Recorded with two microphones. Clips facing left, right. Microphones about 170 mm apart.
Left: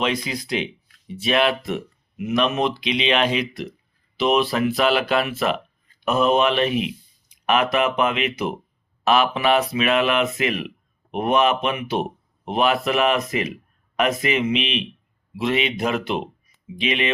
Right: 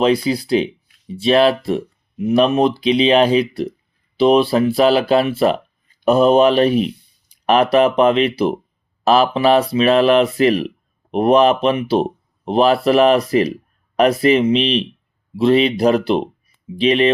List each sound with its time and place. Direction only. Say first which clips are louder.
0.0 s speech: right 9 dB; 35° right (ahead or behind)